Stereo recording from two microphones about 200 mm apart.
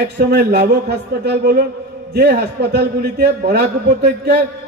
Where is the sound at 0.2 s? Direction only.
50° right (ahead or behind).